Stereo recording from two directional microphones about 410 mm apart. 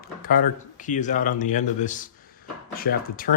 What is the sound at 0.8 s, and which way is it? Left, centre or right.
Speech, centre.